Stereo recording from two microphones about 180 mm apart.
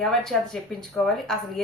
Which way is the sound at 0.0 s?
5° left (ahead or behind).